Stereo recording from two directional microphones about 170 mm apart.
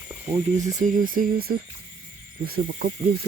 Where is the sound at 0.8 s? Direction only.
50° right (ahead or behind).